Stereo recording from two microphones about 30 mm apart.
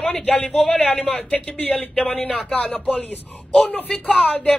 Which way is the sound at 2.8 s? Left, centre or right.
Left.